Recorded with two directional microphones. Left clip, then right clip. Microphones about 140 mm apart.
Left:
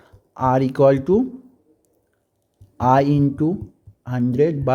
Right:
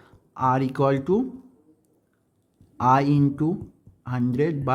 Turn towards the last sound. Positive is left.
turn(degrees=20)  # may be behind; listen again after turning